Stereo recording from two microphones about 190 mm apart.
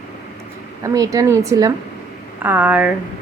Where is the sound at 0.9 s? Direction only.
15° right (ahead or behind).